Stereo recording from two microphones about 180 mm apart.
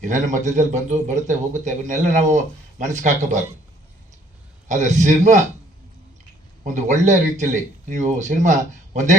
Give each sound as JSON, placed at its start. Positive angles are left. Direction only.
{"t": 0.0, "sound": "a man's voice", "side_deg": -45}
{"t": 4.9, "sound": "a man's voice", "side_deg": -40}
{"t": 6.7, "sound": "speech", "side_deg": -40}